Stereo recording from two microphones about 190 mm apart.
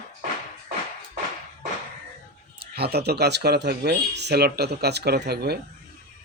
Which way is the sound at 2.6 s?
55° right (ahead or behind).